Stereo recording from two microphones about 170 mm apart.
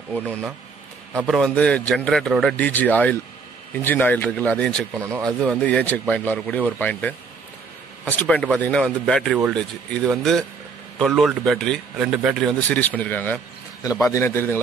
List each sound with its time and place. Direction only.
0.2 s speech: 5° right (ahead or behind)
1.2 s a man's voice: 5° left (ahead or behind)
4.9 s speech: 15° right (ahead or behind)
5.4 s a man's voice: 5° left (ahead or behind)
12.6 s a man's voice: 10° left (ahead or behind)